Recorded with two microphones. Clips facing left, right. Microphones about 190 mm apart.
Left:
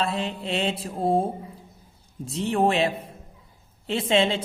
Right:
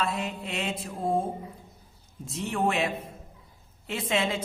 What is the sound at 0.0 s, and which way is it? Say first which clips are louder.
Mantra: left 3 dB; 30° left (ahead or behind).